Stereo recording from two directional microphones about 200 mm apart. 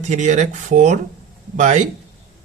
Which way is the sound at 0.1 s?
35° right (ahead or behind).